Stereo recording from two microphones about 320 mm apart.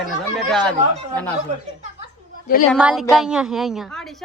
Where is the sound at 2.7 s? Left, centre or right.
Centre.